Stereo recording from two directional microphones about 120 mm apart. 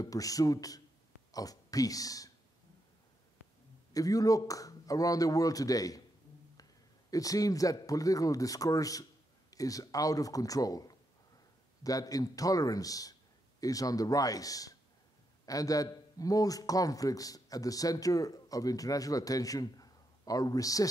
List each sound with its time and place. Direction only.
0.0 s a man's voice: 30° left (ahead or behind)
3.9 s a man's voice: 30° left (ahead or behind)